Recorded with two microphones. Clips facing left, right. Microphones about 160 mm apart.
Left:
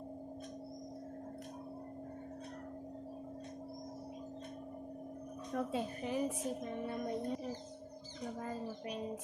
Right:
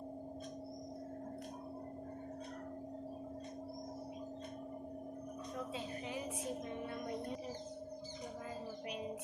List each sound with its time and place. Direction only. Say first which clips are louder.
5.5 s a woman's voice: left 8 dB; 50° left (ahead or behind)